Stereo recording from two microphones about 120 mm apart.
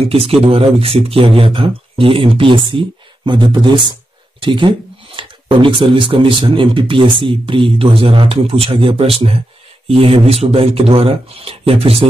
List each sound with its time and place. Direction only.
0.1 s speech: 55° right (ahead or behind)